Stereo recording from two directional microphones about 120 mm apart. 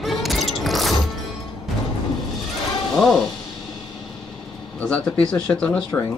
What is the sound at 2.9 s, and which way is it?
Speech, 5° left (ahead or behind).